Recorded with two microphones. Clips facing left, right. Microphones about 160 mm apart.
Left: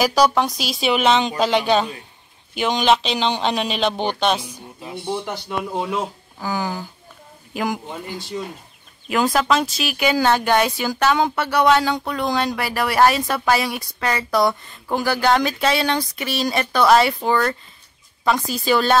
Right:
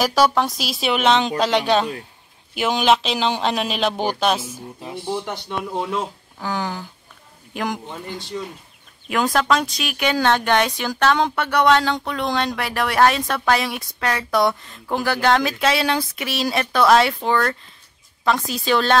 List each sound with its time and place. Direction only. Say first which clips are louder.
0.0 s speech: left 1 dB; centre (ahead or behind)